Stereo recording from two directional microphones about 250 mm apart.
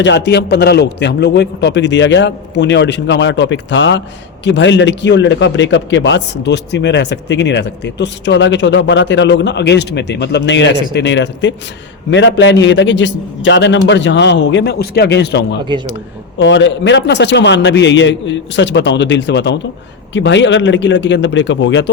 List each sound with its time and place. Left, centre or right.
0.0 s a man's voice: left
15.7 s speech: centre
16.4 s a man's voice: left